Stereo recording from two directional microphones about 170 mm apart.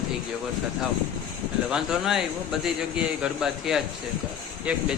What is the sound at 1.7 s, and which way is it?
Speech, 5° right (ahead or behind).